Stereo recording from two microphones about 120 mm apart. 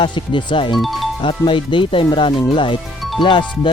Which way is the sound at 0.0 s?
40° left (ahead or behind).